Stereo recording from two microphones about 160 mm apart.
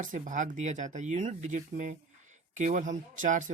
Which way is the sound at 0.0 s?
55° right (ahead or behind).